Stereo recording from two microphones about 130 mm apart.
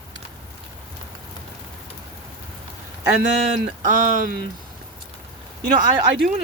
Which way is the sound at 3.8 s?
90° right.